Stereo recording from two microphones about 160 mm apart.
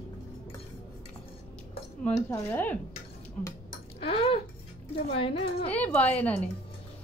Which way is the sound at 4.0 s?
35° left (ahead or behind).